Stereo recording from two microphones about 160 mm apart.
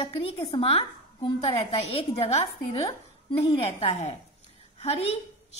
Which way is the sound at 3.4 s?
35° left (ahead or behind).